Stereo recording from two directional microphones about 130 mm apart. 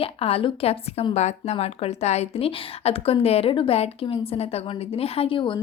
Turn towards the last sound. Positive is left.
turn(degrees=40)  # may be behind; listen again after turning